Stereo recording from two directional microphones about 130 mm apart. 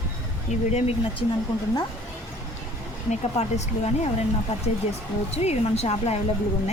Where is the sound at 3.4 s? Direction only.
55° left (ahead or behind).